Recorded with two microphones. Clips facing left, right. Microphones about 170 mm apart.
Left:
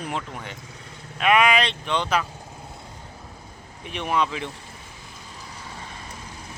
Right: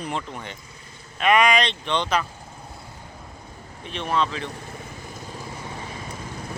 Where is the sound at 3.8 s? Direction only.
10° left (ahead or behind).